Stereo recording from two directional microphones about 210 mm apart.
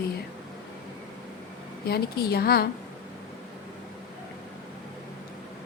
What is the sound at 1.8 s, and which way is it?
Speech, 50° left (ahead or behind).